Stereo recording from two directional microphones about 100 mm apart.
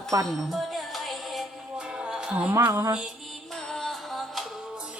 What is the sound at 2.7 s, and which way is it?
Speech, 30° right (ahead or behind).